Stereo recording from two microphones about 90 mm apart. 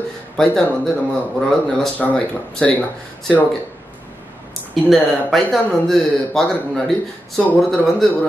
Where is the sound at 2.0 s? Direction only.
15° left (ahead or behind).